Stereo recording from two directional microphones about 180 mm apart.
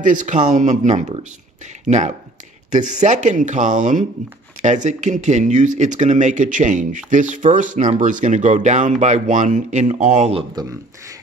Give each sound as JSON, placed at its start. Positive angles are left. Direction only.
{"t": 0.0, "sound": "speech", "side_deg": -45}
{"t": 10.5, "sound": "speech", "side_deg": -20}